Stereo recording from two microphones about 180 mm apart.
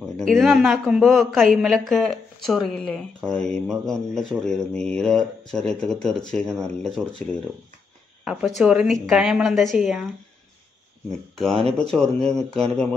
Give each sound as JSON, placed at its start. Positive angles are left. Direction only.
{"t": 0.0, "sound": "speech", "side_deg": 0}
{"t": 8.2, "sound": "speech", "side_deg": -5}
{"t": 11.5, "sound": "speech", "side_deg": -35}
{"t": 11.9, "sound": "speech", "side_deg": 5}